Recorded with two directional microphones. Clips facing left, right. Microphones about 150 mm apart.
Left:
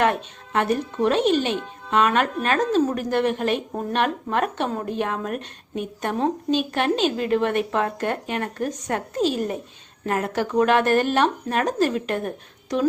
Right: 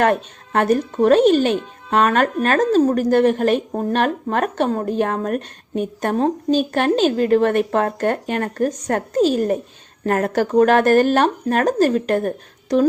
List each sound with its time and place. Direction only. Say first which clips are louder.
0.0 s speech: right 4 dB; 45° right (ahead or behind)